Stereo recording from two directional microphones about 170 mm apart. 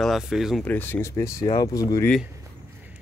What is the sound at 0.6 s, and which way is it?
Speech, 10° left (ahead or behind).